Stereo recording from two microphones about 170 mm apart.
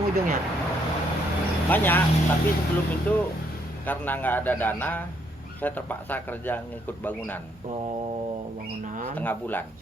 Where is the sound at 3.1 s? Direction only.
10° left (ahead or behind).